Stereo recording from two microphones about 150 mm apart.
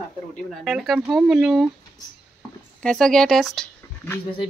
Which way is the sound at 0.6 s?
Centre (ahead or behind).